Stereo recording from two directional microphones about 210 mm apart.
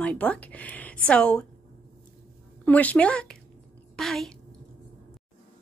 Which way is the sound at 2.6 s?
5° left (ahead or behind).